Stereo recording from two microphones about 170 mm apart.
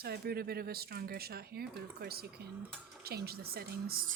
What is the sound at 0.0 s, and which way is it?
Speech, 65° right (ahead or behind).